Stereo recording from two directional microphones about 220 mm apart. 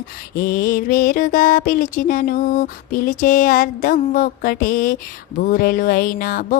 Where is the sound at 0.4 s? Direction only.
40° left (ahead or behind).